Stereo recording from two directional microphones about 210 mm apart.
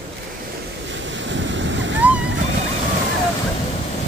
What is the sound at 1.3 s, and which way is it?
Waves, 60° right (ahead or behind).